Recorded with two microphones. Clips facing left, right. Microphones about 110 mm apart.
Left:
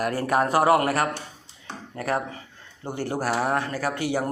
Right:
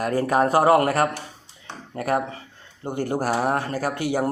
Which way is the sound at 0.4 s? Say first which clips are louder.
Right 2 dB; 40° right (ahead or behind).